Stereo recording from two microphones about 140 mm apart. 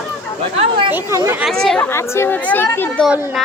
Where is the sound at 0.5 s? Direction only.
45° right (ahead or behind).